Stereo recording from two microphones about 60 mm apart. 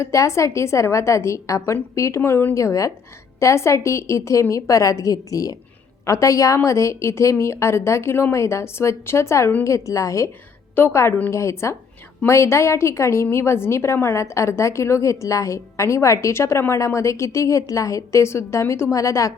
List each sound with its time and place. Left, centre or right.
0.0 s a woman's voice: left
2.6 s a woman's voice: left
6.1 s a woman's voice: left
10.8 s a woman's voice: left
11.3 s a woman's voice: left